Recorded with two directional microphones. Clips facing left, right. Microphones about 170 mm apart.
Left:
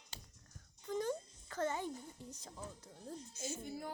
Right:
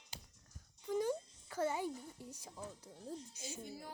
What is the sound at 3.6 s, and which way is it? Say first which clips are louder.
Speech: left 5 dB; 55° left (ahead or behind).